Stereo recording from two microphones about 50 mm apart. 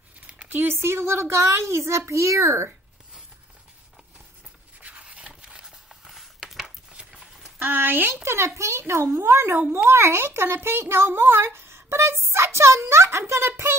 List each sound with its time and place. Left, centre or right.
0.5 s a child's voice: right
5.1 s a sound: centre
7.5 s speech: right
8.1 s a child's voice: right